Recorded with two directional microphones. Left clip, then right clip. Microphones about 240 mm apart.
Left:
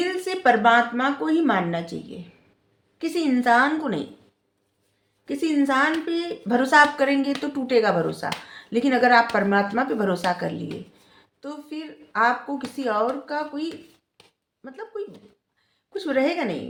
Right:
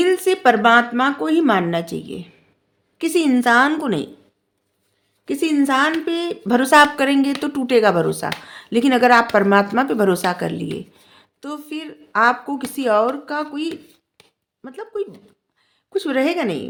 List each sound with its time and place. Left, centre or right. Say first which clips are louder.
0.0 s speech: right 6 dB; right
5.2 s a woman's voice: right 4 dB; right